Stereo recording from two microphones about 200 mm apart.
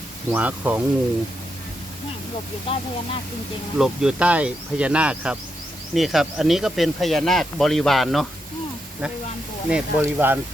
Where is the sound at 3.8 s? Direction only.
5° right (ahead or behind).